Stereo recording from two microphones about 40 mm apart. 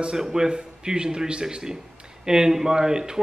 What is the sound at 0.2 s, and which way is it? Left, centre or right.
A man's voice, centre.